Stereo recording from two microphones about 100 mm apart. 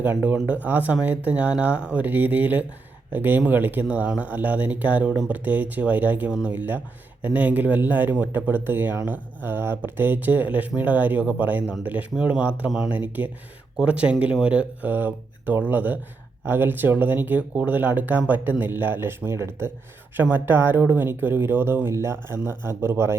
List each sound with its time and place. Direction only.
0.0 s speech: 20° right (ahead or behind)